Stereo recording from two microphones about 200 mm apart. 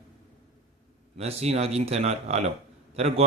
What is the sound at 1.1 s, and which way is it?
Speech, 30° right (ahead or behind).